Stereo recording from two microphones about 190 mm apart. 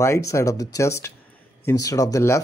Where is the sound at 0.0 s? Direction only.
15° left (ahead or behind).